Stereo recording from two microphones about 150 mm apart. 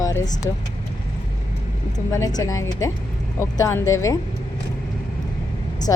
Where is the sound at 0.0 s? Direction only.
25° left (ahead or behind).